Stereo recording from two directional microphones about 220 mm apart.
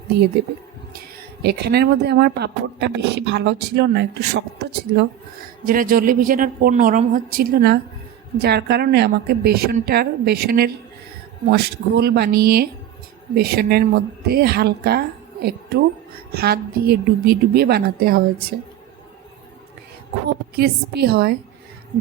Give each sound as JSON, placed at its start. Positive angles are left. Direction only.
{"t": 0.9, "sound": "a woman's voice", "side_deg": -45}
{"t": 20.6, "sound": "speech", "side_deg": -45}